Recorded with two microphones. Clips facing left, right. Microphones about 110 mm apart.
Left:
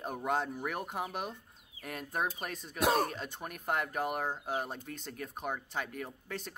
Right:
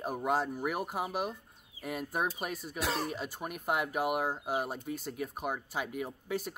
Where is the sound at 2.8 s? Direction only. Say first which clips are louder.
Left 6 dB; 50° left (ahead or behind).